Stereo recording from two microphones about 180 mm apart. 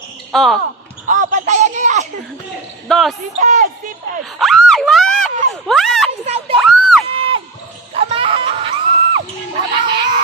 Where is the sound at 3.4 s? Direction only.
45° right (ahead or behind).